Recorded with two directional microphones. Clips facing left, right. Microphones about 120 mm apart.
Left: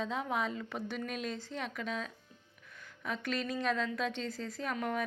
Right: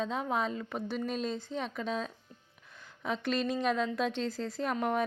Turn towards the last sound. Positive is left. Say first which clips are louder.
# right 4 dB
turn(degrees=-30)  # may be behind; listen again after turning